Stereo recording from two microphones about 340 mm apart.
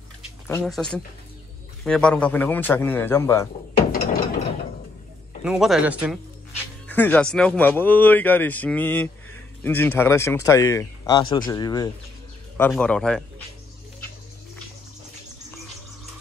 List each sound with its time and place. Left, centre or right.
0.5 s speech: centre
3.7 s ratchet: left
5.4 s speech: centre